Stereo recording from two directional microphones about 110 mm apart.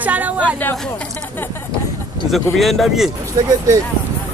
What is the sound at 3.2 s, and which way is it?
Speech, 35° right (ahead or behind).